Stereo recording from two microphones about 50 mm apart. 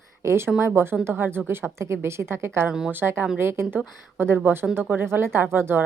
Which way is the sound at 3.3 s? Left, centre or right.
Right.